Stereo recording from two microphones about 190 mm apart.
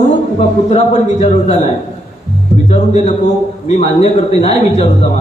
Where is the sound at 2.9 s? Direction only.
35° left (ahead or behind).